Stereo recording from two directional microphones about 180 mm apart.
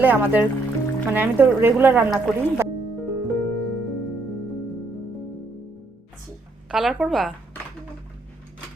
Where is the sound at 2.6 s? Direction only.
15° right (ahead or behind).